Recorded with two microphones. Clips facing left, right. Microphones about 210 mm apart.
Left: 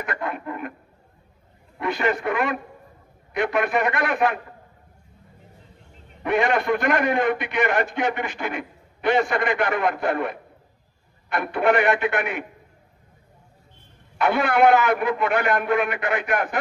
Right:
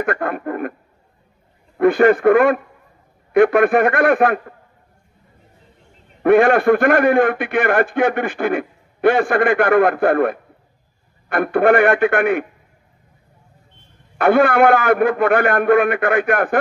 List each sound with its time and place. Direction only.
0.0 s a man's voice: 50° right (ahead or behind)
1.8 s a man's voice: 55° right (ahead or behind)
6.2 s a man's voice: 55° right (ahead or behind)
14.1 s a man's voice: 55° right (ahead or behind)